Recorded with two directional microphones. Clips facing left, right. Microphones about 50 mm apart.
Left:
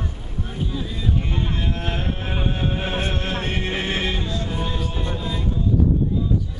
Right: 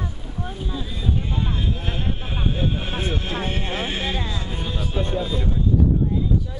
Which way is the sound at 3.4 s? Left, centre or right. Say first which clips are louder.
Left 1 dB; left.